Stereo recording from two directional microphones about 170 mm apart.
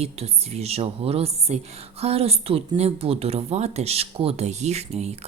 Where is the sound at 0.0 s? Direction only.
40° right (ahead or behind).